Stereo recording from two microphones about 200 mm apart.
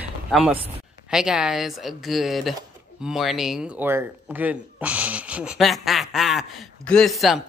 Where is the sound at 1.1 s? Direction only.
5° right (ahead or behind).